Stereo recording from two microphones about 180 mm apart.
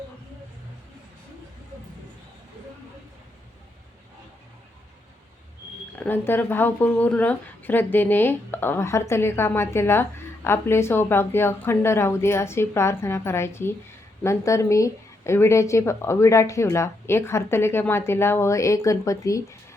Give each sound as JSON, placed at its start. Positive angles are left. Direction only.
{"t": 6.0, "sound": "a woman's voice", "side_deg": 10}